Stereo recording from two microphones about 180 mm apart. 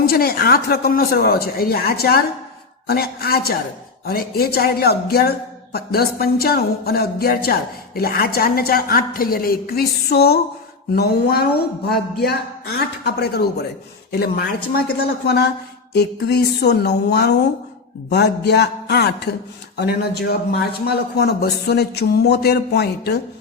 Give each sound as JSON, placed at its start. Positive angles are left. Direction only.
{"t": 0.0, "sound": "a woman's voice", "side_deg": 60}